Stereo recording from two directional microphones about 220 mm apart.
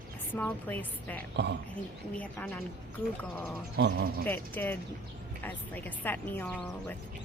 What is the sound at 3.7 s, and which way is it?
Speech, 50° right (ahead or behind).